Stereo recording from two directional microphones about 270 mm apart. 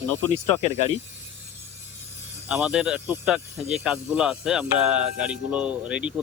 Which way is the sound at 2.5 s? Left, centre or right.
Centre.